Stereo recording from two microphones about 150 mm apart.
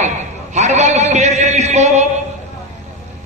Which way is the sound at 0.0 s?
50° right (ahead or behind).